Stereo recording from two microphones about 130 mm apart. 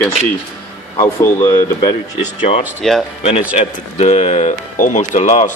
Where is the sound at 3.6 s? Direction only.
55° left (ahead or behind).